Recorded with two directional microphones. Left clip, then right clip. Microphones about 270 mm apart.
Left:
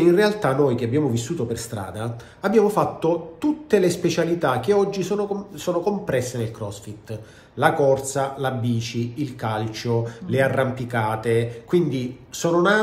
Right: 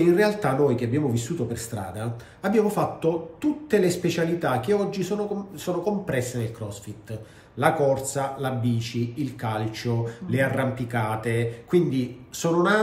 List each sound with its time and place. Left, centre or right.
0.0 s speech: centre